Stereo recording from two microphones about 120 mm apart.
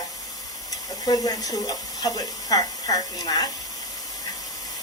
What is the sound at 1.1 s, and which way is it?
Speech, 35° left (ahead or behind).